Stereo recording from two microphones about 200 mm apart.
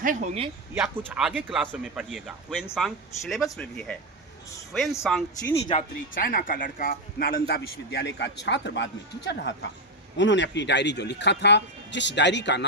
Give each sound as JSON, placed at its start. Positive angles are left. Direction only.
{"t": 0.0, "sound": "speech", "side_deg": -40}
{"t": 0.7, "sound": "speech", "side_deg": -5}
{"t": 6.1, "sound": "a man's voice", "side_deg": 45}